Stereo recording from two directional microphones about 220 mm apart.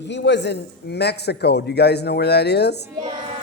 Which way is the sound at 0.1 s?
50° left (ahead or behind).